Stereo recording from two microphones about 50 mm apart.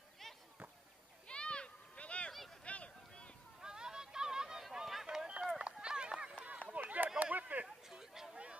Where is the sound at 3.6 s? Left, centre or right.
Centre.